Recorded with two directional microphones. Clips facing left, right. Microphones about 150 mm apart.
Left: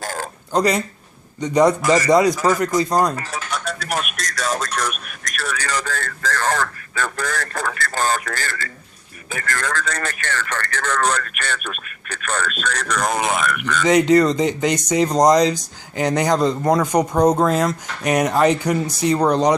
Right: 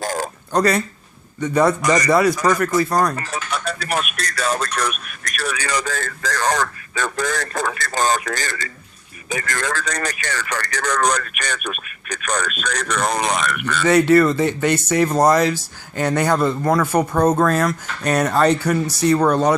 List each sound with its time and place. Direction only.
0.0 s a sound: 15° right (ahead or behind)
0.5 s speech: 15° left (ahead or behind)
3.2 s speech: centre (ahead or behind)
5.7 s speech: 15° right (ahead or behind); by 13.7 s 5° left (ahead or behind)
13.8 s speech: 15° left (ahead or behind)